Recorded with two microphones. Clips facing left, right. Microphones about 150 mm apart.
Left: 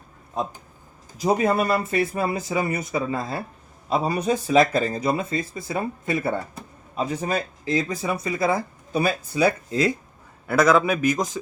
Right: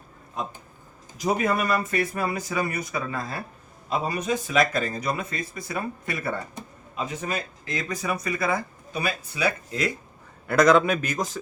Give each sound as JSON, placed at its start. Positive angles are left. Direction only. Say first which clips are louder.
{"t": 1.2, "sound": "a man's voice", "louder": "left 4 dB", "side_deg": 30}
{"t": 10.4, "sound": "a man's voice", "louder": "even", "side_deg": 5}